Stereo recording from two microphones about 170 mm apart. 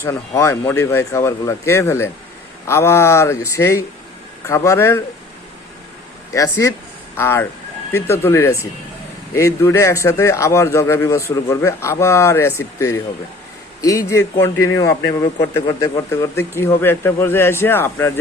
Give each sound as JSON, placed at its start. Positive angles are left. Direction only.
{"t": 0.0, "sound": "a man's voice", "side_deg": 15}
{"t": 6.3, "sound": "a man's voice", "side_deg": 20}